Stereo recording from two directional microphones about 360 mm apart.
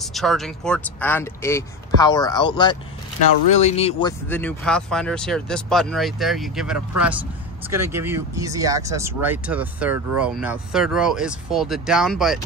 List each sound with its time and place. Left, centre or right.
0.1 s speech: centre
4.3 s speech: centre